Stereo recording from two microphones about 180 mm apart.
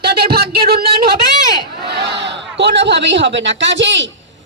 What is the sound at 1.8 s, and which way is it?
A man's voice, 70° right (ahead or behind).